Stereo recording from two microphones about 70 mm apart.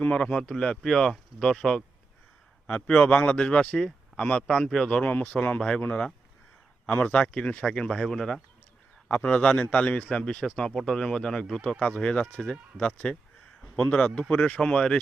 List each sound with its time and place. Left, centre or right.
0.0 s speech: centre
9.0 s speech: centre